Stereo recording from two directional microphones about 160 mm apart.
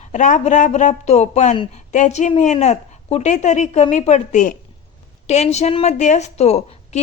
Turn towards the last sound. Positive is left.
turn(degrees=45)  # may be behind; listen again after turning